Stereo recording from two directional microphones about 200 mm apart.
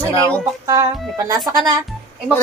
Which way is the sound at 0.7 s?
15° right (ahead or behind).